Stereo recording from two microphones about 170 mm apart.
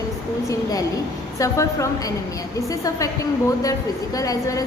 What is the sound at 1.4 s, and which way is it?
A woman's voice, 20° left (ahead or behind).